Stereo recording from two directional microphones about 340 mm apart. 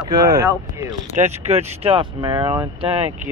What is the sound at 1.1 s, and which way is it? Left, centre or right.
Speech, centre.